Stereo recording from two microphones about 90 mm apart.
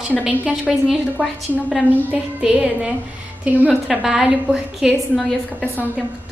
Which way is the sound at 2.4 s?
10° right (ahead or behind).